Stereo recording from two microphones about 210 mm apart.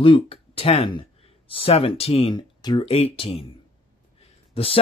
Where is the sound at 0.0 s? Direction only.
25° left (ahead or behind).